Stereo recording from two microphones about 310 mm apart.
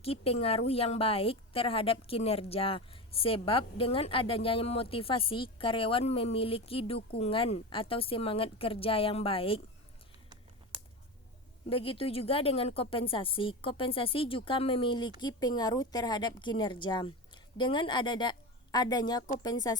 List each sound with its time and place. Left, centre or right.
0.0 s a woman's voice: centre
11.7 s a woman's voice: centre